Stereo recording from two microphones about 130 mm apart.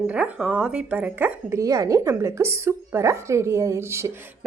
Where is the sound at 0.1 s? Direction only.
10° right (ahead or behind).